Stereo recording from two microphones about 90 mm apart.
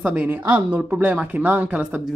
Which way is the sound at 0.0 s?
15° right (ahead or behind).